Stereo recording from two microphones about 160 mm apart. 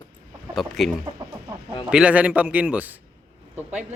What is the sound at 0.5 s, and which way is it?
A man's voice, centre (ahead or behind).